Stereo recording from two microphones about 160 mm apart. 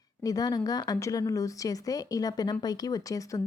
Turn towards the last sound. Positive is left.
turn(degrees=20)  # may be behind; listen again after turning